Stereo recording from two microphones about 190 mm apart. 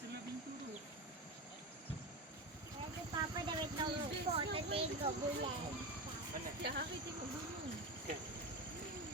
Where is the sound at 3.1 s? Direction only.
25° right (ahead or behind).